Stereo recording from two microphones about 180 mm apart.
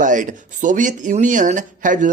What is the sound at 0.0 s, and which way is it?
Speech, 45° right (ahead or behind).